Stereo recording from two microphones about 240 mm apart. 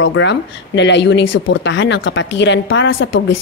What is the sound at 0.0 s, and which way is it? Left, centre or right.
A woman's voice, left.